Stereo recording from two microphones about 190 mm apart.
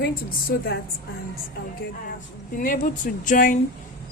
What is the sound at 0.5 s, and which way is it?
Speech, 55° left (ahead or behind).